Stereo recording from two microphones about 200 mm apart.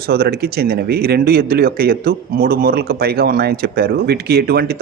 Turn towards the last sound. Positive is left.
turn(degrees=-50)  # may be behind; listen again after turning